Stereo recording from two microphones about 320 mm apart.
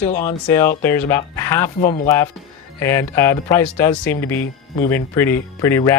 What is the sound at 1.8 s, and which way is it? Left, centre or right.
Speech, left.